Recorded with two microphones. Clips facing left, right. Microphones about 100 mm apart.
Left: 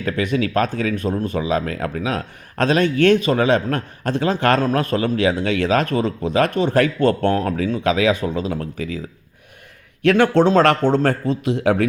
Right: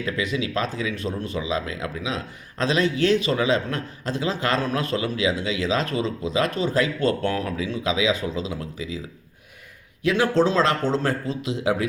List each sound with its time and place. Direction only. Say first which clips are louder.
0.0 s a man's voice: left 5 dB; 50° left (ahead or behind)
10.0 s a man's voice: left 5 dB; 60° left (ahead or behind)